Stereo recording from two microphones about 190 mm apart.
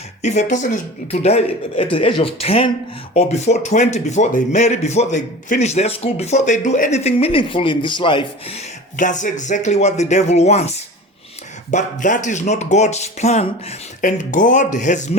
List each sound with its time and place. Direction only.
0.2 s speech: 40° left (ahead or behind)
11.7 s speech: 40° left (ahead or behind)